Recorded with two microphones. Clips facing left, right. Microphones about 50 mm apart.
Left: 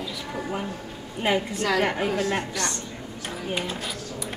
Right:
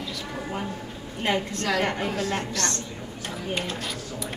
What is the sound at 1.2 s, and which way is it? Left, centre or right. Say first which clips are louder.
A woman's voice: left 2 dB; centre.